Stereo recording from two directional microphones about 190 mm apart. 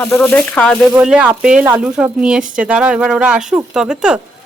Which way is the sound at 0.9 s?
5° right (ahead or behind).